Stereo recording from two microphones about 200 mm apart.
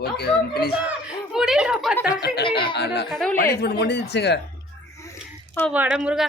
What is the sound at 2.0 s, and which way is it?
Speech, 50° left (ahead or behind).